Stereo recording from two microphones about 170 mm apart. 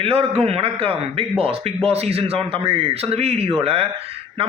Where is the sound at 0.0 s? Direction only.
35° right (ahead or behind).